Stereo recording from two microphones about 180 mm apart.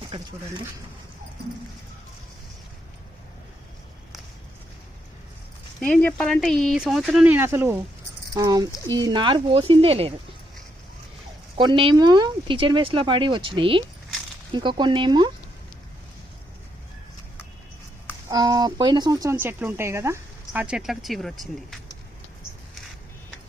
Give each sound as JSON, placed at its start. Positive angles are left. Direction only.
{"t": 5.8, "sound": "speech", "side_deg": 10}
{"t": 11.5, "sound": "speech", "side_deg": -25}
{"t": 18.3, "sound": "speech", "side_deg": -20}